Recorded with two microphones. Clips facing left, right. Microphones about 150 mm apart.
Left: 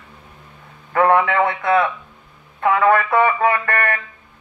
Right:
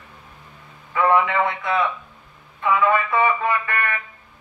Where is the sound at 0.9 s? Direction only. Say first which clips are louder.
Left 3 dB; 55° left (ahead or behind).